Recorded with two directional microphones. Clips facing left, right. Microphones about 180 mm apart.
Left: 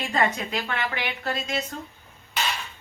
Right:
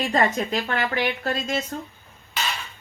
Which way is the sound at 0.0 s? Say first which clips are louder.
Right 3 dB; 35° right (ahead or behind).